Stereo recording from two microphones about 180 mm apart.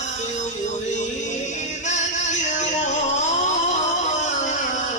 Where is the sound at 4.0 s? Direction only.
40° left (ahead or behind).